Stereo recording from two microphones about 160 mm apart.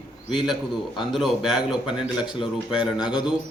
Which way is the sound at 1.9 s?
30° left (ahead or behind).